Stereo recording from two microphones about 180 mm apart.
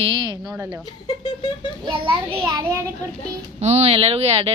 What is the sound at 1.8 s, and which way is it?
Speech, 30° right (ahead or behind).